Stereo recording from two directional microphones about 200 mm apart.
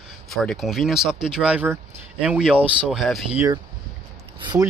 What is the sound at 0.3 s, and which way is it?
Speech, centre (ahead or behind).